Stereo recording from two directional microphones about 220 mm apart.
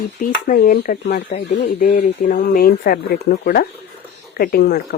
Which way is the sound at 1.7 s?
35° left (ahead or behind).